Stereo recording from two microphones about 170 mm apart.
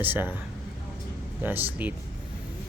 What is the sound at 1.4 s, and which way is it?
Speech, 10° right (ahead or behind).